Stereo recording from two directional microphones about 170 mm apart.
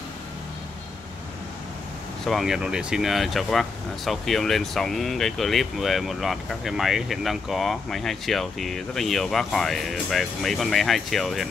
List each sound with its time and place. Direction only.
2.2 s speech: centre (ahead or behind)